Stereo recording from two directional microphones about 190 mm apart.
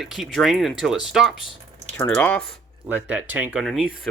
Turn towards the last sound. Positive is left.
turn(degrees=0)  # may be behind; listen again after turning